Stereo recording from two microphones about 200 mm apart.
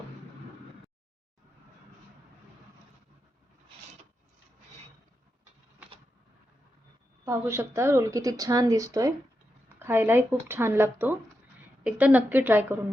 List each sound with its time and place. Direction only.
7.3 s a woman's voice: 15° right (ahead or behind)